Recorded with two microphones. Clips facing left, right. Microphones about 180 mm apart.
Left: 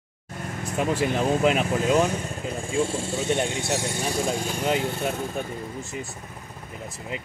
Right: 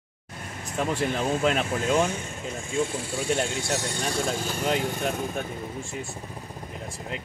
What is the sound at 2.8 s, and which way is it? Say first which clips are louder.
Speech: left 2 dB; 30° left (ahead or behind).